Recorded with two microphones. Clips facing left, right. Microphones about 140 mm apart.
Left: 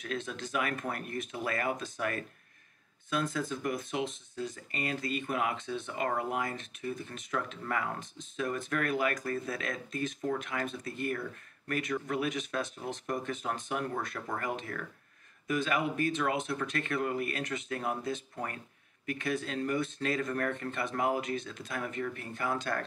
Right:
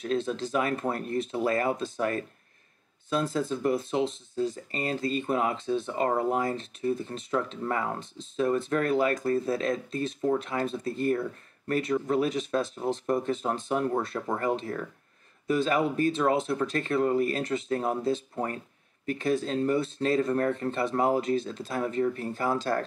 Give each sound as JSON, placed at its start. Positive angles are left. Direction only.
{"t": 0.0, "sound": "speech", "side_deg": -30}